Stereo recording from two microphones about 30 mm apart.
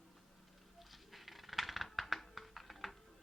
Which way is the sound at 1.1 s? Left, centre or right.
Centre.